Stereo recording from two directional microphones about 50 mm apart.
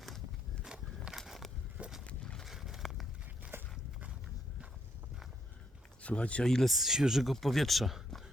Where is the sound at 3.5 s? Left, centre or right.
Right.